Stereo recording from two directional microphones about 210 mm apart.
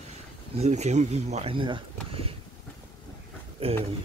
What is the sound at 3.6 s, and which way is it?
Speech, 25° right (ahead or behind).